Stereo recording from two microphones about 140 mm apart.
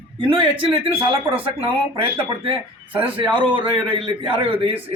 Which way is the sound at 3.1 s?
35° right (ahead or behind).